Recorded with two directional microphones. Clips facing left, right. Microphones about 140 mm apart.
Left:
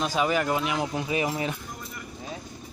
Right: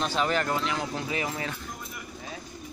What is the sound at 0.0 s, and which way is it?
Speech, 10° left (ahead or behind).